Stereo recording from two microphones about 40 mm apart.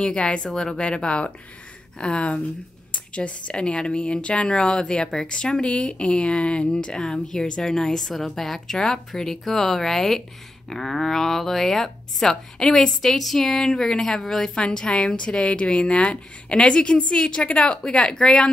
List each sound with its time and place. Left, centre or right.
0.0 s speech: left
0.5 s a woman's voice: centre
0.7 s a woman's voice: left; by 14.5 s centre
14.5 s speech: left